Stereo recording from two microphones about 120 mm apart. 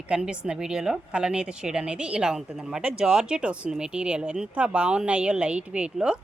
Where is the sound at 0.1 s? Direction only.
10° right (ahead or behind).